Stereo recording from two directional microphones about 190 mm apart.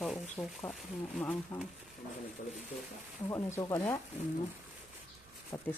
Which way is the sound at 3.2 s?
15° left (ahead or behind).